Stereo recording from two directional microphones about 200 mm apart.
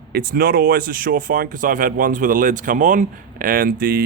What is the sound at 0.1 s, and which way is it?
Speech, 50° right (ahead or behind).